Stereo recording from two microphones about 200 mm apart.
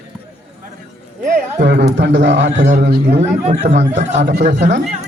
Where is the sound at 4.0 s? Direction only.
35° right (ahead or behind).